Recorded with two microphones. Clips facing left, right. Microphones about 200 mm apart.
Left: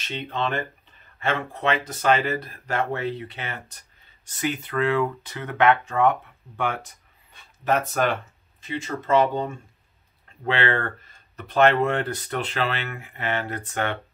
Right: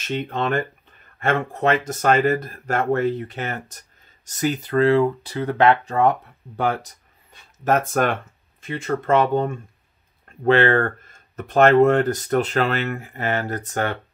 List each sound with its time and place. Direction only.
0.0 s speech: 45° right (ahead or behind)